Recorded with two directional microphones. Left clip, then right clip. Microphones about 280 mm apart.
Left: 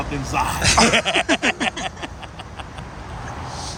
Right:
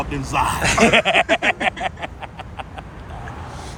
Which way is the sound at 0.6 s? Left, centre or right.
Right.